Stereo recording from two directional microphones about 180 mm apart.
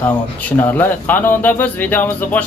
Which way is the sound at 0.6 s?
10° left (ahead or behind).